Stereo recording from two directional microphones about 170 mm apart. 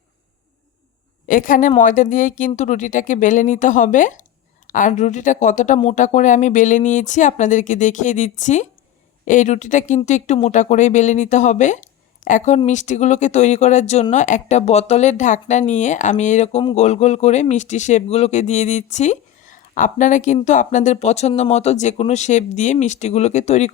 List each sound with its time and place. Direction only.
1.3 s speech: 50° left (ahead or behind)